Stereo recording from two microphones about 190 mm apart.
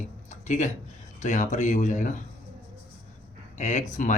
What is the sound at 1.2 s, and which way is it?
Speech, 40° left (ahead or behind).